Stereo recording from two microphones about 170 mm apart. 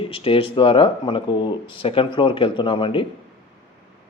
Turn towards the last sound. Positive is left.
turn(degrees=30)  # may be behind; listen again after turning